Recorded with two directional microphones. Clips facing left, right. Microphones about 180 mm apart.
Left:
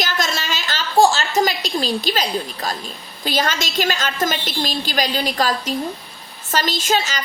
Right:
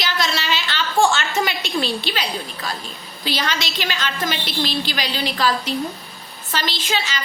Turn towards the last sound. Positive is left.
turn(degrees=45)  # may be behind; listen again after turning